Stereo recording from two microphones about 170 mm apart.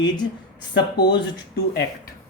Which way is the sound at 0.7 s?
90° left.